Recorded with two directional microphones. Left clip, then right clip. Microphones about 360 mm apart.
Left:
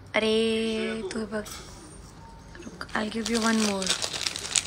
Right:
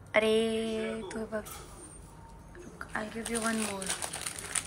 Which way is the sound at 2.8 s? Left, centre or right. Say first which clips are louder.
Left 7 dB; centre.